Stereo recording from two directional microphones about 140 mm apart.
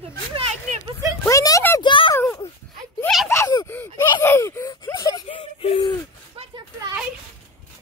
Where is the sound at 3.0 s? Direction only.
Centre (ahead or behind).